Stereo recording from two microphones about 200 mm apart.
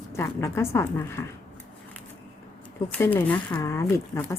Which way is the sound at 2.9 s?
10° left (ahead or behind).